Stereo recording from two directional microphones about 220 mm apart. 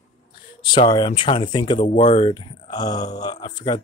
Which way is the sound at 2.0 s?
30° left (ahead or behind).